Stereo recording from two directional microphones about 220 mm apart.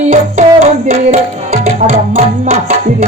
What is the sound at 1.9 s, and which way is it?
Music, 35° right (ahead or behind).